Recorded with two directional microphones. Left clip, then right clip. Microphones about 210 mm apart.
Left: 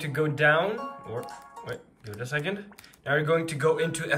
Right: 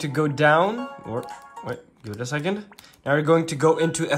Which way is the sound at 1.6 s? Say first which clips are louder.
Right 6 dB; 20° right (ahead or behind).